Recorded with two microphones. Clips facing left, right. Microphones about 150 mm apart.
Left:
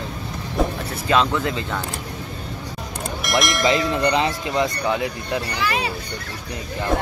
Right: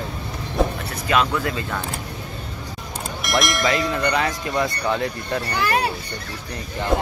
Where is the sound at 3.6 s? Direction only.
25° left (ahead or behind).